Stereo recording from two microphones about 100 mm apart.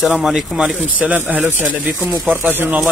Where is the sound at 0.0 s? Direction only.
5° right (ahead or behind).